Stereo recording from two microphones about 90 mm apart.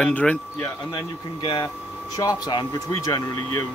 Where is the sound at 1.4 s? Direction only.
65° left (ahead or behind).